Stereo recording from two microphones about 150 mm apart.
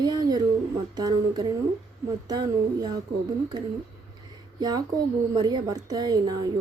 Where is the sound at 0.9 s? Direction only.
25° right (ahead or behind).